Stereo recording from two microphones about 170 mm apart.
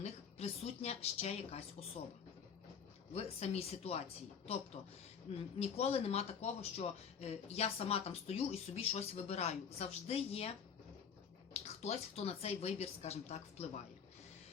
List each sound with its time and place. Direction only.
0.0 s a woman's voice: 40° left (ahead or behind)
3.1 s speech: 35° left (ahead or behind)
11.5 s speech: 40° left (ahead or behind)